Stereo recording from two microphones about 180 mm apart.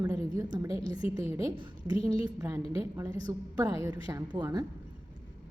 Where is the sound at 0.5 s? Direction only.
20° right (ahead or behind).